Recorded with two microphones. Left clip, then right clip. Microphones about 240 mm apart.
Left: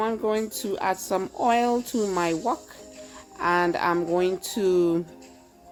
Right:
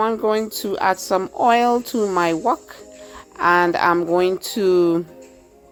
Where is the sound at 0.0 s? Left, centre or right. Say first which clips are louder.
Right 6 dB; centre.